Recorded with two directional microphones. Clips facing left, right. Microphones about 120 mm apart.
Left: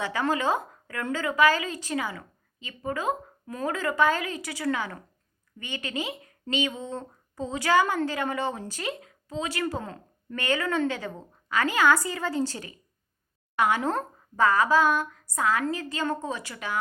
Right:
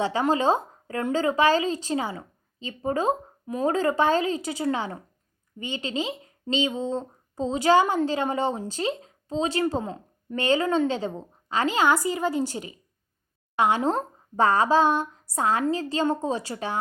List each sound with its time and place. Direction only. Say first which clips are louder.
0.0 s speech: right 4 dB; 25° right (ahead or behind)
3.4 s speech: right 6 dB; 20° right (ahead or behind)
3.7 s speech: right 3 dB; 30° right (ahead or behind)